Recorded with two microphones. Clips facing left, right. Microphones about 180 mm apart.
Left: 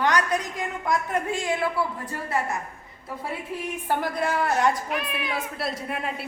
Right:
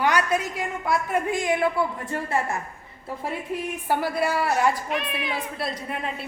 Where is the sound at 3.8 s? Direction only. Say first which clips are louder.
Right 2 dB; 10° right (ahead or behind).